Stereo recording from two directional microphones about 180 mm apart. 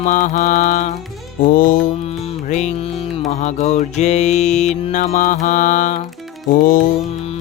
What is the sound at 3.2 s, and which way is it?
Music, 40° left (ahead or behind).